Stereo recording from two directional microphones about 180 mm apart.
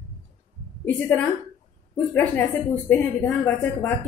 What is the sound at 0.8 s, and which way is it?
Speech, 10° left (ahead or behind).